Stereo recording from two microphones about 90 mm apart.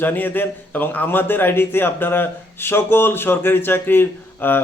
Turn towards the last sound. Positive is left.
turn(degrees=25)  # may be behind; listen again after turning